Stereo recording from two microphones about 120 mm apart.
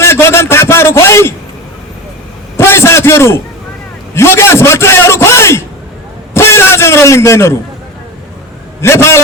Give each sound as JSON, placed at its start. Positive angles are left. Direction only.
{"t": 0.0, "sound": "a man's voice", "side_deg": 20}
{"t": 2.6, "sound": "a sound", "side_deg": 20}
{"t": 4.1, "sound": "a man's voice", "side_deg": 20}
{"t": 8.8, "sound": "a man's voice", "side_deg": 20}